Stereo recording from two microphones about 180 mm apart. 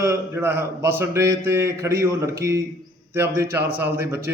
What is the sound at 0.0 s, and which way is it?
A man's voice, 15° right (ahead or behind).